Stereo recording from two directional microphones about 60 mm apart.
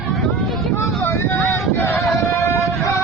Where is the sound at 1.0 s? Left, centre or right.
Left.